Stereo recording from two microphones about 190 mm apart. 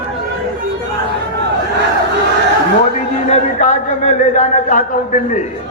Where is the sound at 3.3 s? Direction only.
40° left (ahead or behind).